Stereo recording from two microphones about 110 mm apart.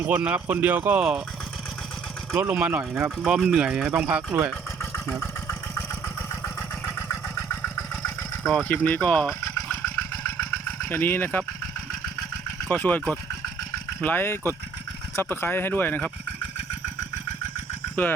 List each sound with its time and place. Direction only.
0.0 s speech: 15° right (ahead or behind)
2.3 s speech: 15° right (ahead or behind)
5.2 s vehicle: 25° left (ahead or behind)
6.4 s engine: 25° left (ahead or behind)
8.6 s speech: 15° left (ahead or behind)
10.8 s speech: 15° left (ahead or behind)
12.6 s speech: 15° left (ahead or behind)
14.0 s speech: 15° left (ahead or behind)
18.0 s speech: 15° left (ahead or behind)